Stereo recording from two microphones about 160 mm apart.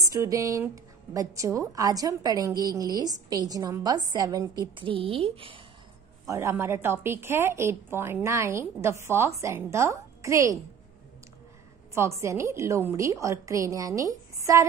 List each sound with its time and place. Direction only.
0.0 s a woman's voice: 20° right (ahead or behind)
6.2 s a woman's voice: 20° right (ahead or behind)
11.9 s a woman's voice: 20° right (ahead or behind)